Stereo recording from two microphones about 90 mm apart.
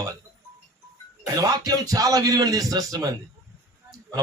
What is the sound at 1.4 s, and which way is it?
A man's voice, 45° right (ahead or behind).